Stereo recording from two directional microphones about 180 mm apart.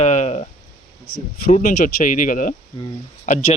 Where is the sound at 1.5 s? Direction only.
40° left (ahead or behind).